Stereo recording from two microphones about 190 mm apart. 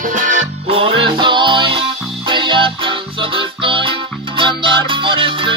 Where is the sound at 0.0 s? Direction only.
40° right (ahead or behind).